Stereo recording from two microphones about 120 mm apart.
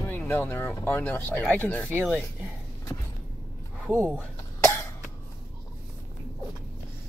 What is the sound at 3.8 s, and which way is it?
Speech, 15° right (ahead or behind).